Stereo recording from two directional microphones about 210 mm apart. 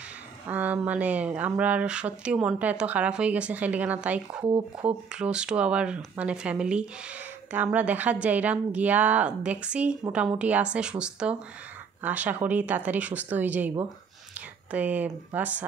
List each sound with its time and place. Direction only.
0.5 s speech: 5° right (ahead or behind)
4.4 s speech: 20° right (ahead or behind)
4.8 s speech: 5° right (ahead or behind)